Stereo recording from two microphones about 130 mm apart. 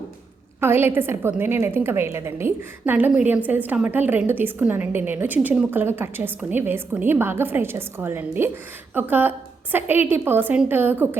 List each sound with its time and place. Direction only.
0.6 s a woman's voice: 20° right (ahead or behind)